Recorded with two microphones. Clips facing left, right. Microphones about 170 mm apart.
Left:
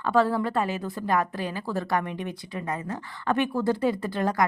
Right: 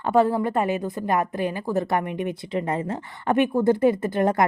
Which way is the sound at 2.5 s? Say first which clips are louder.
Right 6 dB; 30° right (ahead or behind).